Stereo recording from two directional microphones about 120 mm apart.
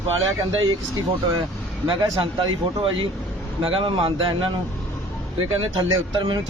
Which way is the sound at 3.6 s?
50° right (ahead or behind).